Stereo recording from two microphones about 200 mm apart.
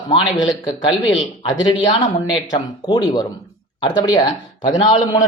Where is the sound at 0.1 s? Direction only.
20° left (ahead or behind).